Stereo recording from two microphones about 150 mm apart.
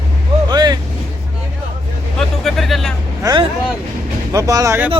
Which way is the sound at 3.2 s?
25° right (ahead or behind).